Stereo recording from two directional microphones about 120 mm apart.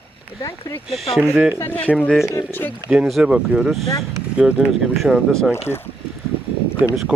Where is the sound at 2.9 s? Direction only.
5° right (ahead or behind).